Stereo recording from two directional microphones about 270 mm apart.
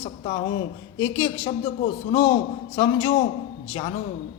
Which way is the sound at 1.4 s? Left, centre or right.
Left.